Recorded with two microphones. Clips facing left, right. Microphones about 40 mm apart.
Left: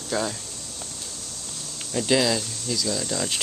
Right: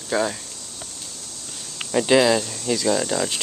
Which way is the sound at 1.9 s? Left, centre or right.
Right.